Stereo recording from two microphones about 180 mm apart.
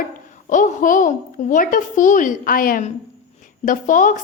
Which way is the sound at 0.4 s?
45° left (ahead or behind).